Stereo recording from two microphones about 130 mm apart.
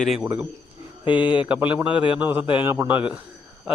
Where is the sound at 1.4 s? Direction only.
10° right (ahead or behind).